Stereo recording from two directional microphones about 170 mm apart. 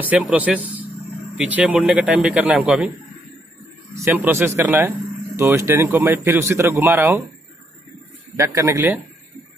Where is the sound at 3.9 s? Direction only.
15° right (ahead or behind).